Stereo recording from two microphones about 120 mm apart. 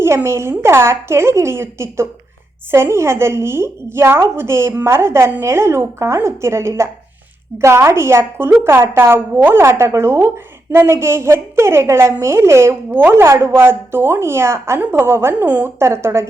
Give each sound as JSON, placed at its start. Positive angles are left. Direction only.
{"t": 0.0, "sound": "a woman's voice", "side_deg": -20}